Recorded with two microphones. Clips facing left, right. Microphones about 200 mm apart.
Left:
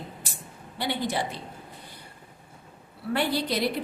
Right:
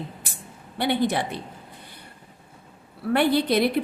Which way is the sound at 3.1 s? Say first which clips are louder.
Right 7 dB; 60° right (ahead or behind).